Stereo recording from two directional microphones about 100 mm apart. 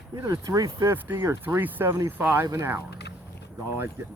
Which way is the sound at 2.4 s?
35° right (ahead or behind).